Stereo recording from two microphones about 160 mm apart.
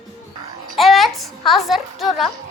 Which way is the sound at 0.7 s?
Centre (ahead or behind).